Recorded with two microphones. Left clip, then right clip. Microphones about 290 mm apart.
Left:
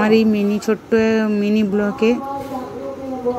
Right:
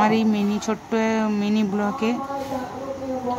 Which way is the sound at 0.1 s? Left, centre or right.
Right.